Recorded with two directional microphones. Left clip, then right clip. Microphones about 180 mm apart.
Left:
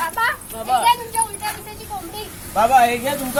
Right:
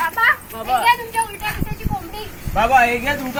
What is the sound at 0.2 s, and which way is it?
Children playing, 10° left (ahead or behind).